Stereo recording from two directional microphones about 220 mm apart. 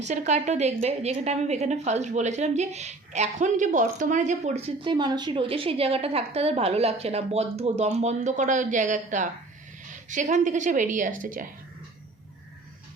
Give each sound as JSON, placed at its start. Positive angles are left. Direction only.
{"t": 0.0, "sound": "a woman's voice", "side_deg": -30}